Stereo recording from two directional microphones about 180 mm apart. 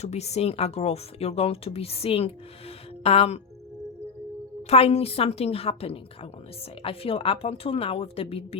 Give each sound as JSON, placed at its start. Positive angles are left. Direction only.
{"t": 0.0, "sound": "speech", "side_deg": 35}
{"t": 4.7, "sound": "speech", "side_deg": 35}